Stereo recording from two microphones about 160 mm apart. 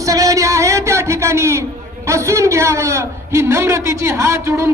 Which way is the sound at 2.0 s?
20° right (ahead or behind).